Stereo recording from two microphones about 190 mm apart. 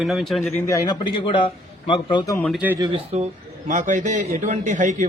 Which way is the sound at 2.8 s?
30° right (ahead or behind).